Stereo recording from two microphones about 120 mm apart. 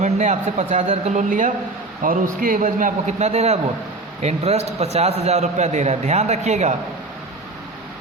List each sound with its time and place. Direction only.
0.0 s a man's voice: 90° right